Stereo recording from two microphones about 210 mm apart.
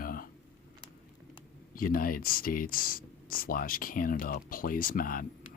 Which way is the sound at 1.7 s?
45° left (ahead or behind).